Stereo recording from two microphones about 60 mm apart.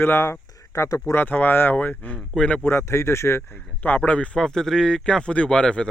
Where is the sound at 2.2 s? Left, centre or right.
Centre.